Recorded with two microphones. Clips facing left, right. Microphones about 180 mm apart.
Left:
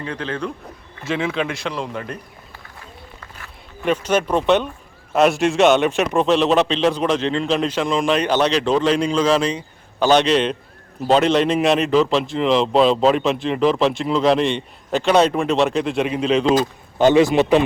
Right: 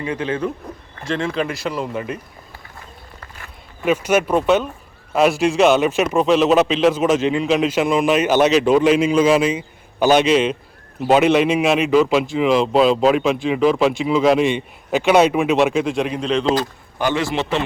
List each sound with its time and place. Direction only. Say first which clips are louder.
0.0 s speech: right 4 dB; 10° right (ahead or behind)
1.0 s a man's voice: even; 5° left (ahead or behind)
3.8 s a man's voice: right 2 dB; 10° right (ahead or behind)
17.0 s a man's voice: left 7 dB; 20° left (ahead or behind)